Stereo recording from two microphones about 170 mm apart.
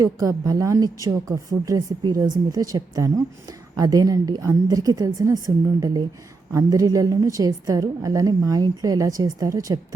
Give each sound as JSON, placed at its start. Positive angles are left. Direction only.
{"t": 0.0, "sound": "a woman's voice", "side_deg": -20}
{"t": 6.5, "sound": "a woman's voice", "side_deg": -20}